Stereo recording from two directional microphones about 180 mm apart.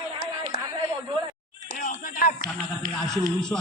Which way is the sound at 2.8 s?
50° right (ahead or behind).